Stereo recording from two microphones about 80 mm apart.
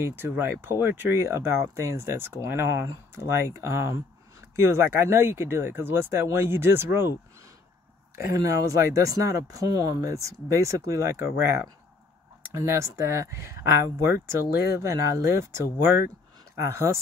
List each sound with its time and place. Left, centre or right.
0.0 s speech: right
8.3 s speech: right